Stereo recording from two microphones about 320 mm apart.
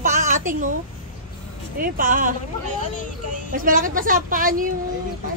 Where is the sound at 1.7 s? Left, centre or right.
Right.